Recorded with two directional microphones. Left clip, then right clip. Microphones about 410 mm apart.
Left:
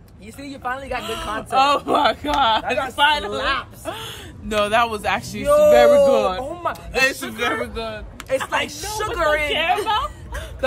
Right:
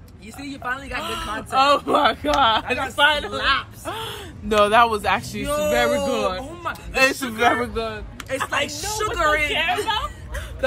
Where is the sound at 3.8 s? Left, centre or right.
Centre.